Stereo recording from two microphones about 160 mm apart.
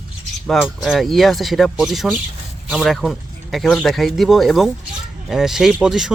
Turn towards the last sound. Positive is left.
turn(degrees=-5)  # may be behind; listen again after turning